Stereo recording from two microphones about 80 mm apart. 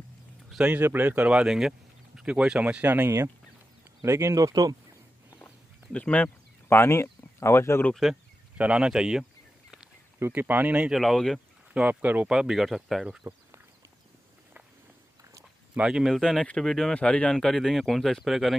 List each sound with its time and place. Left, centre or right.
0.7 s speech: right
1.3 s speech: centre; by 3.1 s right
4.0 s speech: right
5.9 s speech: centre
6.7 s speech: left
7.9 s speech: centre
8.5 s speech: centre
10.1 s speech: right
10.4 s speech: right
10.9 s speech: centre
11.7 s speech: centre
12.3 s speech: centre
15.7 s speech: centre
16.1 s speech: centre